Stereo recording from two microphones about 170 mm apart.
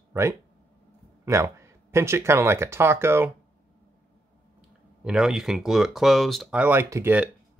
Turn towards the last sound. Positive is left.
turn(degrees=-15)  # may be behind; listen again after turning